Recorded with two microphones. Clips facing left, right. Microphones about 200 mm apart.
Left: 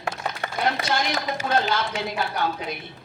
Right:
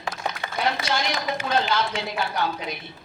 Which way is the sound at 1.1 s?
55° left (ahead or behind).